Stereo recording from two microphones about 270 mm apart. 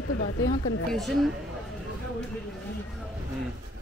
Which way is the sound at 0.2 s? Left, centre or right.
Left.